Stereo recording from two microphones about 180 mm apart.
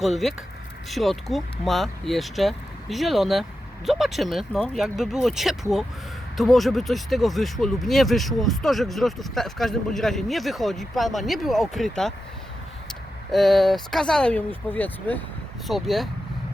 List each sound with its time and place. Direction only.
0.0 s speech: centre (ahead or behind)
13.3 s speech: centre (ahead or behind)